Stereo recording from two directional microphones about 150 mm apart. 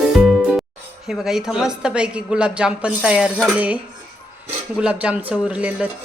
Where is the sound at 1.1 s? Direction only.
5° right (ahead or behind).